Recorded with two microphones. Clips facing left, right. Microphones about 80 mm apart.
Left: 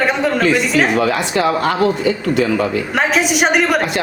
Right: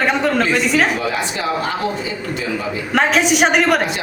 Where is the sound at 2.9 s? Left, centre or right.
Centre.